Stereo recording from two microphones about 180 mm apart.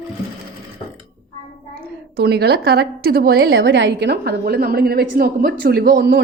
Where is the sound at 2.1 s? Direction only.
65° right (ahead or behind).